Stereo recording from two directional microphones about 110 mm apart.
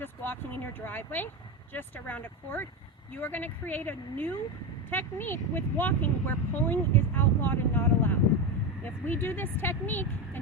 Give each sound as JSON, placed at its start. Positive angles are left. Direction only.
{"t": 0.0, "sound": "speech", "side_deg": 20}